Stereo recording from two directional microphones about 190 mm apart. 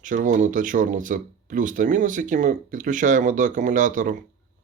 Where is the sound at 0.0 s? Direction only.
45° right (ahead or behind).